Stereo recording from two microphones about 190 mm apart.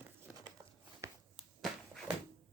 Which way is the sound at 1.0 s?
15° right (ahead or behind).